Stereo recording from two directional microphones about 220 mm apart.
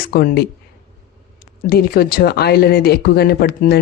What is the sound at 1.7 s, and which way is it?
Speech, 45° left (ahead or behind).